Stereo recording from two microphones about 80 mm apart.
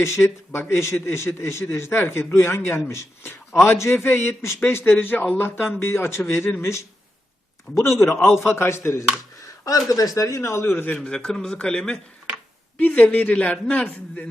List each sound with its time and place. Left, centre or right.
0.0 s a man's voice: left
10.9 s a man's voice: centre